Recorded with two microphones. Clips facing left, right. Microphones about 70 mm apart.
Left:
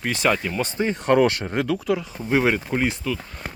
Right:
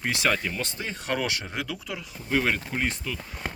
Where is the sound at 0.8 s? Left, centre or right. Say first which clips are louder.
Left 13 dB; left.